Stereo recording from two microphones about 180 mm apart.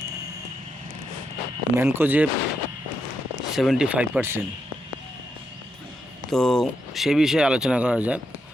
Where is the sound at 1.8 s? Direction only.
15° right (ahead or behind).